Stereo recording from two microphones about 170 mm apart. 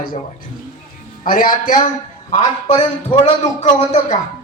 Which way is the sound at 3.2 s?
40° left (ahead or behind).